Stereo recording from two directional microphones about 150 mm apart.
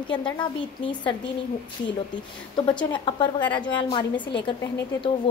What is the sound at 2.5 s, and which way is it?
A woman's voice, 30° left (ahead or behind).